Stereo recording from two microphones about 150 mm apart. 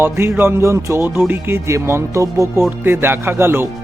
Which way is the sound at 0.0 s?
15° right (ahead or behind).